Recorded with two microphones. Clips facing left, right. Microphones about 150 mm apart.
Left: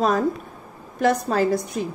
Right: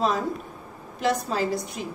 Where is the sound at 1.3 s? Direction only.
50° left (ahead or behind).